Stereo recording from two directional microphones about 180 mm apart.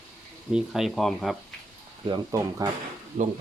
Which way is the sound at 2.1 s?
25° right (ahead or behind).